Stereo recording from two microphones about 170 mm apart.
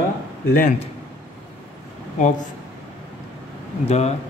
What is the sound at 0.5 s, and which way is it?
Speech, 45° left (ahead or behind).